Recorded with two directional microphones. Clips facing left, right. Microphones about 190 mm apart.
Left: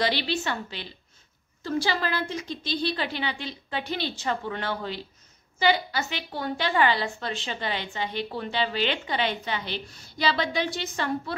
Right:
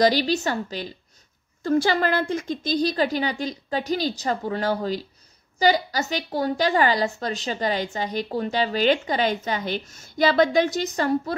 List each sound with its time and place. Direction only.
0.0 s a woman's voice: 40° right (ahead or behind)